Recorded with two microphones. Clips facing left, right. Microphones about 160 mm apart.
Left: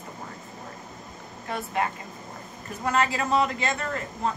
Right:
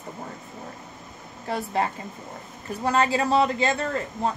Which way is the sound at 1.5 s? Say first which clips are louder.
Right 3 dB; 35° right (ahead or behind).